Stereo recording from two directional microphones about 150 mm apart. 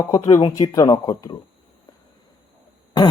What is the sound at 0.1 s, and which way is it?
A man's voice, 25° left (ahead or behind).